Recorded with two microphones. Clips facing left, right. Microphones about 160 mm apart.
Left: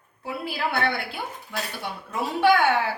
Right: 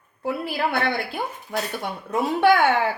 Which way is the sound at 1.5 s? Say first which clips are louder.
Right 5 dB; 50° right (ahead or behind).